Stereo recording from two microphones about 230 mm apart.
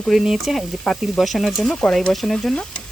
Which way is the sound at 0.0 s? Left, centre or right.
Centre.